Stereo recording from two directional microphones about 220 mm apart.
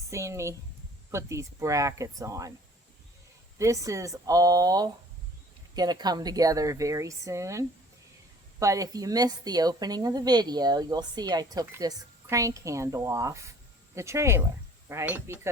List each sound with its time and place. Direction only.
0.1 s a woman's voice: 15° right (ahead or behind)
3.6 s a woman's voice: 15° right (ahead or behind)